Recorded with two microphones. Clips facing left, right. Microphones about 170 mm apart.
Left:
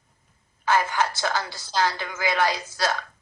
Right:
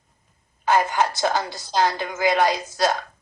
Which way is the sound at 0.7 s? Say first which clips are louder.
Right 3 dB; 20° right (ahead or behind).